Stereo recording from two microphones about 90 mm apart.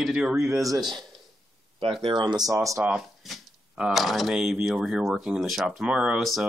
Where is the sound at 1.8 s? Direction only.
80° right; by 2.6 s 45° right (ahead or behind).